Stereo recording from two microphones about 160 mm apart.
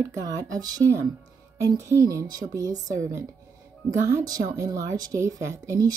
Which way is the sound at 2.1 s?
20° right (ahead or behind).